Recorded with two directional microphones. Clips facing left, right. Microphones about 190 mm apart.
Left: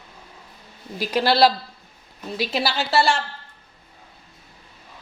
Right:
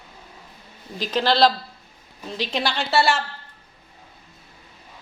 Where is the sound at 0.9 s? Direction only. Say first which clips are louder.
Left 1 dB; 10° left (ahead or behind).